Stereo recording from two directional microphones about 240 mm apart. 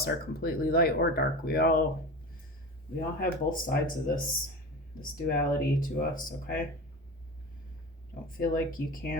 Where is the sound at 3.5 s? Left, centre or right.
Left.